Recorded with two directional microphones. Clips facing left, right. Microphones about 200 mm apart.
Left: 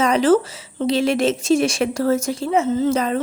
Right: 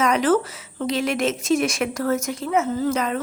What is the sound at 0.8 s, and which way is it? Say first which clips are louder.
Speech: left 4 dB; 30° left (ahead or behind).